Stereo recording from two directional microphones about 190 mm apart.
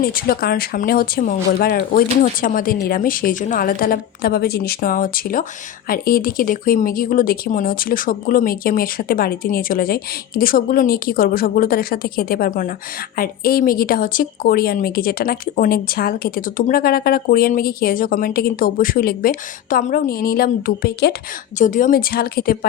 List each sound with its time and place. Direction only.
0.0 s a woman's voice: 50° left (ahead or behind)
21.6 s a woman's voice: 45° left (ahead or behind)